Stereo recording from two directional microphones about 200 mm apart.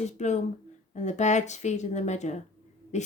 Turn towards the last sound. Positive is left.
turn(degrees=35)  # may be behind; listen again after turning